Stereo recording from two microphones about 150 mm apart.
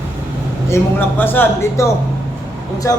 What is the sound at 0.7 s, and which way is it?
A man's voice, 15° left (ahead or behind).